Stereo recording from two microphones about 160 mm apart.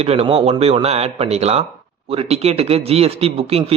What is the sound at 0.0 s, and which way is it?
Speech, 40° right (ahead or behind).